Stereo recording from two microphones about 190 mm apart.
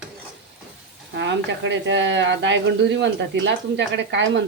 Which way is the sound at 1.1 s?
70° right (ahead or behind).